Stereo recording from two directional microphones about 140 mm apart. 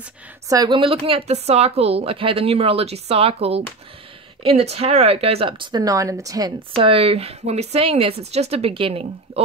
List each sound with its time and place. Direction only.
0.5 s speech: 25° right (ahead or behind)
0.7 s speech: 40° right (ahead or behind)
6.7 s speech: 40° right (ahead or behind)